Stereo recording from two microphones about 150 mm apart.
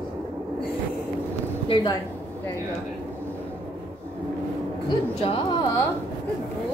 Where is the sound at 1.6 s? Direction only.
35° left (ahead or behind).